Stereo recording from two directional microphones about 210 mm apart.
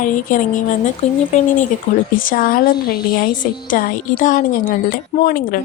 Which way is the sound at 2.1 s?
40° left (ahead or behind).